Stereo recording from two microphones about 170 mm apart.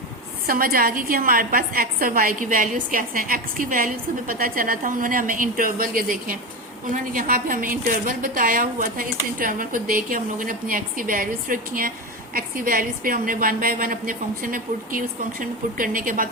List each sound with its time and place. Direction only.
0.4 s a woman's voice: 60° right (ahead or behind)